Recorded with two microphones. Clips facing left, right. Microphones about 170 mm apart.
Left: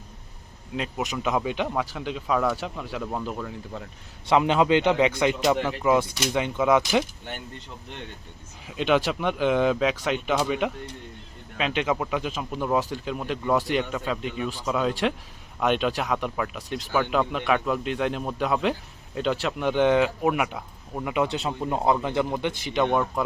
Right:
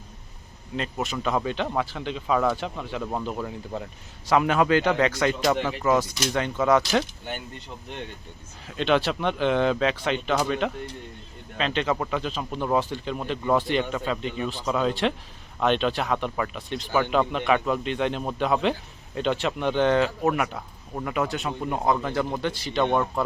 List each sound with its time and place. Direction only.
1.1 s speech: 10° left (ahead or behind)
3.3 s speech: 20° right (ahead or behind)
4.3 s speech: 20° left (ahead or behind)
8.6 s speech: 10° left (ahead or behind)